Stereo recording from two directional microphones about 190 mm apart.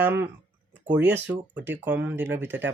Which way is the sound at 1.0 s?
10° right (ahead or behind).